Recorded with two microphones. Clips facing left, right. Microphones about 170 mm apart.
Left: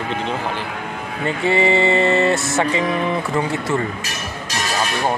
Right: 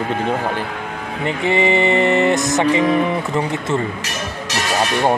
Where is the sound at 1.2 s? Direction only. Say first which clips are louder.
Even; 20° right (ahead or behind).